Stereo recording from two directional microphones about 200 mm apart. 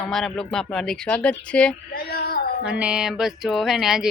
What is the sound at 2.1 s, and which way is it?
Female singing, 50° left (ahead or behind).